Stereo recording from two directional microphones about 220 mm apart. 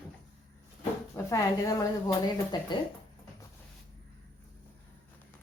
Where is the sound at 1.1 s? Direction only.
15° left (ahead or behind).